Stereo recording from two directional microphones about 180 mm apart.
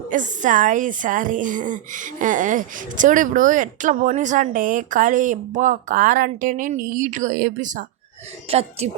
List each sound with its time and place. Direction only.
0.1 s a woman's voice: 45° right (ahead or behind)